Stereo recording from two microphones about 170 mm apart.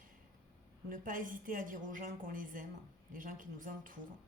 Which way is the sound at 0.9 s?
50° right (ahead or behind).